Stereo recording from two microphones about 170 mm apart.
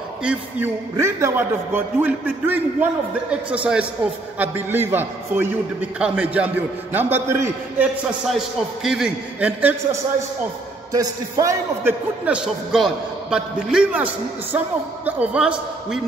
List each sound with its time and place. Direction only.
0.2 s a man's voice: 10° right (ahead or behind)
10.9 s a man's voice: 20° right (ahead or behind)
12.3 s a man's voice: 5° right (ahead or behind)